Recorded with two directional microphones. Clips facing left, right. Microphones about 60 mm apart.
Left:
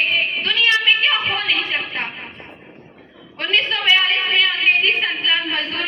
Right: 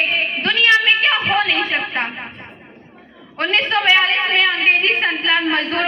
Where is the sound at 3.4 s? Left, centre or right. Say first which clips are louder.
Right 3 dB; right.